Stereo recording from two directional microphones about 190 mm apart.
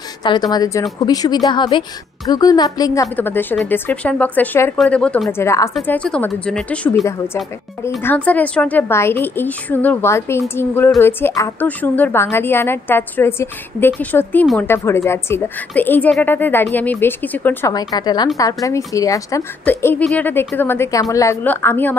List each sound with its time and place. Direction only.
0.2 s a woman's voice: 20° left (ahead or behind)